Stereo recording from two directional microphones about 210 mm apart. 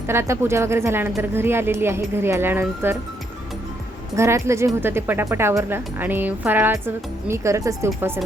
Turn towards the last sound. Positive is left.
turn(degrees=-15)  # may be behind; listen again after turning